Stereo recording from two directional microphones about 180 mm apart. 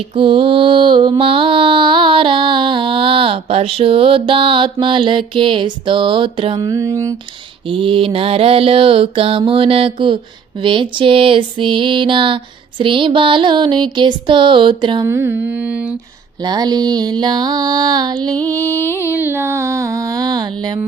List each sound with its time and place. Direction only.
0.1 s mantra: 30° right (ahead or behind)
7.7 s mantra: 30° right (ahead or behind)
15.0 s music: 15° right (ahead or behind)
16.4 s mantra: 20° right (ahead or behind)
18.3 s music: 10° left (ahead or behind)
19.1 s music: 10° right (ahead or behind)